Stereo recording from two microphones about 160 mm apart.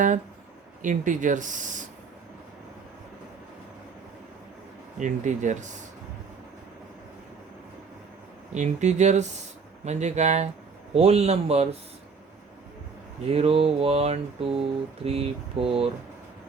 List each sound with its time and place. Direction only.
0.8 s speech: 50° right (ahead or behind)
4.9 s speech: 50° right (ahead or behind)
8.5 s speech: 45° right (ahead or behind)
10.9 s mantra: 40° right (ahead or behind)
13.3 s mantra: 35° right (ahead or behind)